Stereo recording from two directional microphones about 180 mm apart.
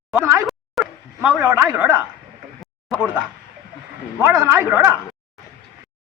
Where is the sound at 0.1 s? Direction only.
15° right (ahead or behind).